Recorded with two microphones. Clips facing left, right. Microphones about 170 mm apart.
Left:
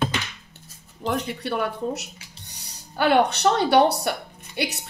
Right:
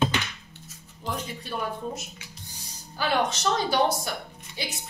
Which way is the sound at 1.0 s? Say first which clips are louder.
Left 7 dB; 75° left (ahead or behind).